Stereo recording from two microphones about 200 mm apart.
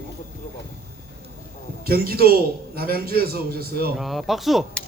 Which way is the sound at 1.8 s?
50° right (ahead or behind).